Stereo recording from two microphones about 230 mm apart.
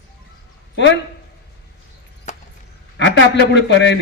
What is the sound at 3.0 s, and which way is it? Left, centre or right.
Speech, left.